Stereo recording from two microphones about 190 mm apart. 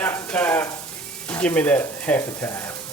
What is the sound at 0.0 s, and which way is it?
Stir, 10° left (ahead or behind).